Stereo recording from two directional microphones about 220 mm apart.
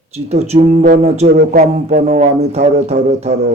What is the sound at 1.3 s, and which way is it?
Speech, 45° right (ahead or behind).